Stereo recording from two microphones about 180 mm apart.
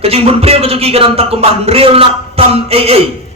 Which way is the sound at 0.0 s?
35° right (ahead or behind).